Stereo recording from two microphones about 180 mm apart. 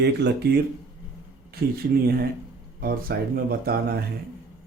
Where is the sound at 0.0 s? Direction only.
65° right (ahead or behind).